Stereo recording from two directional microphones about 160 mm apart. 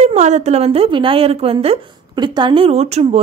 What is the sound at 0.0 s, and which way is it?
A woman's voice, 45° right (ahead or behind).